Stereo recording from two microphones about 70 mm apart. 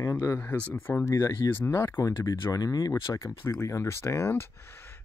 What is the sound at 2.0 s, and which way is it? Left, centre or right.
Speech, left.